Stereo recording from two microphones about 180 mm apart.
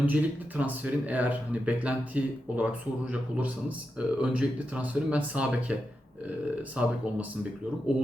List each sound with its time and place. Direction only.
0.0 s speech: 10° right (ahead or behind)